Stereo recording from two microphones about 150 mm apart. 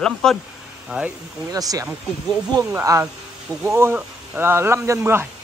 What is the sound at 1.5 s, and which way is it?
Speech, 25° right (ahead or behind).